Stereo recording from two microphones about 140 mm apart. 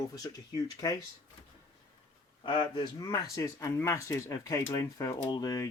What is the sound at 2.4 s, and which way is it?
Speech, 35° left (ahead or behind).